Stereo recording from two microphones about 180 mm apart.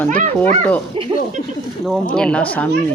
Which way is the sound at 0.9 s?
30° right (ahead or behind).